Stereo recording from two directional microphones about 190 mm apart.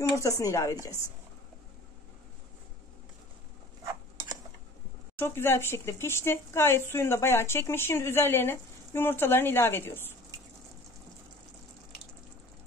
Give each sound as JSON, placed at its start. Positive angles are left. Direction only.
{"t": 0.1, "sound": "speech", "side_deg": 15}
{"t": 5.2, "sound": "speech", "side_deg": 15}